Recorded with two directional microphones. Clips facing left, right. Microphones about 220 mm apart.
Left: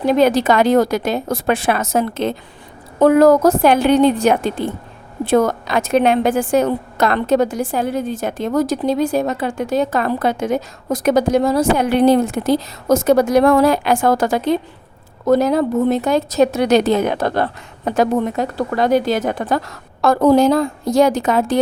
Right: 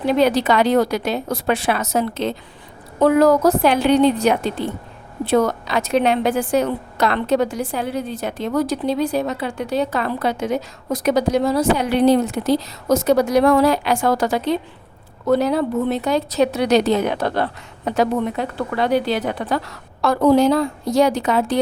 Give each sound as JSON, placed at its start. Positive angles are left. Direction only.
{"t": 0.0, "sound": "a woman's voice", "side_deg": 45}